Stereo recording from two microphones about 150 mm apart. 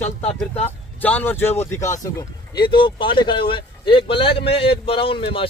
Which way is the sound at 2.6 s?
35° left (ahead or behind).